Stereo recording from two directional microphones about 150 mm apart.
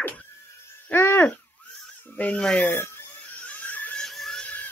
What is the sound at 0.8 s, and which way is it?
Hoot, 15° left (ahead or behind).